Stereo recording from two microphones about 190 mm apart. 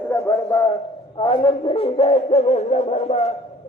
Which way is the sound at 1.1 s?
25° left (ahead or behind).